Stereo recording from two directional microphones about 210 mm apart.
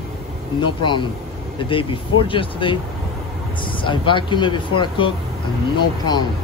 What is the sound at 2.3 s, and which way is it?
Speech, 25° left (ahead or behind).